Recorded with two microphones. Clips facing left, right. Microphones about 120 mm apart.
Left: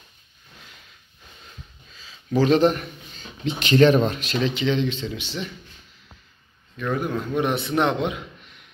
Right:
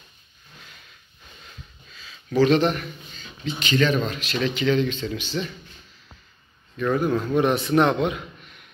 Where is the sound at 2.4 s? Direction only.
35° left (ahead or behind).